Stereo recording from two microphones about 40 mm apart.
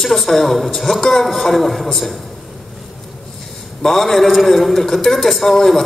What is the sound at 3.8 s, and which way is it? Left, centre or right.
A man's voice, centre.